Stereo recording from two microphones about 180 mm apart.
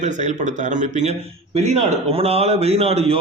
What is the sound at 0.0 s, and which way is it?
Speech, 40° right (ahead or behind).